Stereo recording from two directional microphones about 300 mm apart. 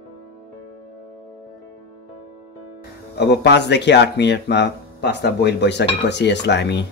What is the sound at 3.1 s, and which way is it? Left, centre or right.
Speech, left.